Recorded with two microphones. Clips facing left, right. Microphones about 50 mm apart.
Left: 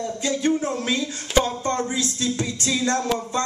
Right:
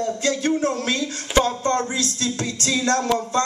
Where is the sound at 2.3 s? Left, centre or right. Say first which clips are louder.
Even; left.